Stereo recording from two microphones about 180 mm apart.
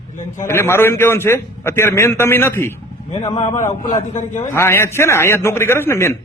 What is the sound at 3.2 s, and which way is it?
Speech, 30° left (ahead or behind).